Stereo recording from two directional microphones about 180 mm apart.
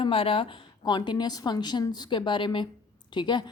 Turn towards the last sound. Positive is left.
turn(degrees=25)  # may be behind; listen again after turning